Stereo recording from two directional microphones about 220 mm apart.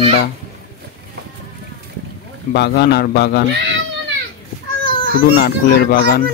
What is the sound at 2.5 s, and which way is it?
Speech, 50° left (ahead or behind).